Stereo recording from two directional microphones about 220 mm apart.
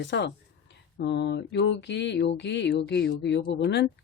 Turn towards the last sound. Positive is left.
turn(degrees=50)  # may be behind; listen again after turning